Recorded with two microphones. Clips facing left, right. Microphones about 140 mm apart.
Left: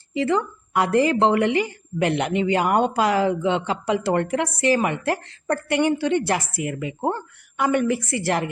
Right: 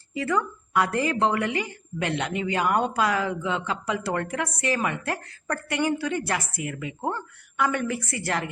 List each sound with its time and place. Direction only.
0.1 s a woman's voice: 25° left (ahead or behind)